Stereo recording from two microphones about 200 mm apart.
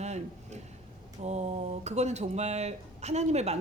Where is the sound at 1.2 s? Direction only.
35° right (ahead or behind).